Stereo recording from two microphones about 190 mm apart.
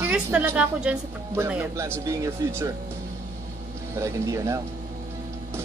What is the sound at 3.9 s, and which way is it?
Speech, 15° right (ahead or behind).